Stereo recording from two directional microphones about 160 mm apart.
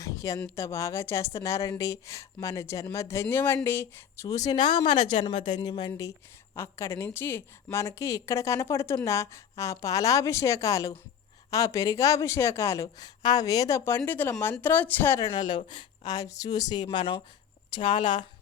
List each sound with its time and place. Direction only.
0.0 s a woman's voice: 20° left (ahead or behind)
15.3 s speech: 30° left (ahead or behind)